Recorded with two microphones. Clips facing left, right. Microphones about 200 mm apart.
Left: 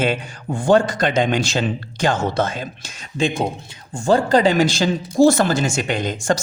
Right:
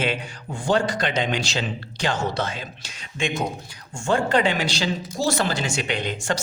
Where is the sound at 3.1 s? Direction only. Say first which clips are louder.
Left 5 dB; 35° left (ahead or behind).